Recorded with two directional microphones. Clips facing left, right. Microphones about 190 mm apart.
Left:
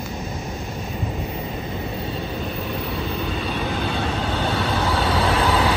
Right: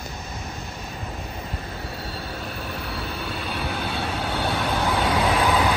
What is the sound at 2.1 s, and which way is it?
Vehicle, 5° right (ahead or behind).